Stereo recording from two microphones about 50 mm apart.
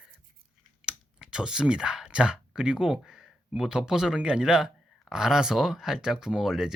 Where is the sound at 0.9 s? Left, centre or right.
Centre.